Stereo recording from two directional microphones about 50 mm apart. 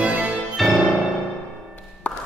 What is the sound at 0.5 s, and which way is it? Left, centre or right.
Music, centre.